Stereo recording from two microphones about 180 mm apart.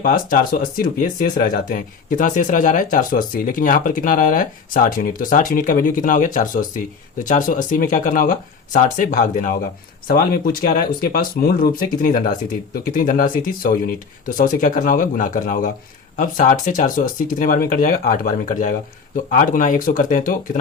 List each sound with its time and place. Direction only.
0.0 s speech: 50° left (ahead or behind)